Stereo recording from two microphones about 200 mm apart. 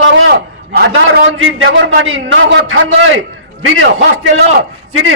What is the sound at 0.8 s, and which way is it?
Speech, 55° right (ahead or behind).